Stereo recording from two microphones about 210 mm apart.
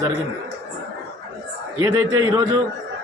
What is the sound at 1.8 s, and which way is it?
Speech, 15° right (ahead or behind).